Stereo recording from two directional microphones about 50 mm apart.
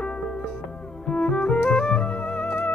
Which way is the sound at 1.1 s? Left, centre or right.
Left.